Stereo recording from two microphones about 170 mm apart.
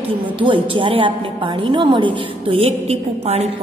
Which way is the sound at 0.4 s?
30° right (ahead or behind).